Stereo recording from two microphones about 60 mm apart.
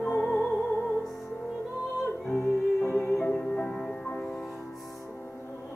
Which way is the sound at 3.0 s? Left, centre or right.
Left.